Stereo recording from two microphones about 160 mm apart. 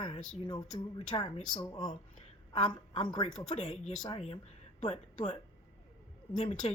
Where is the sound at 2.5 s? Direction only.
35° left (ahead or behind).